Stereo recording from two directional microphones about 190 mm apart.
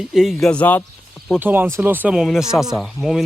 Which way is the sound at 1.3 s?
10° right (ahead or behind).